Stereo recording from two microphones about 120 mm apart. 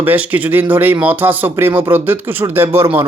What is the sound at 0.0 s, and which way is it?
A man's voice, 15° right (ahead or behind).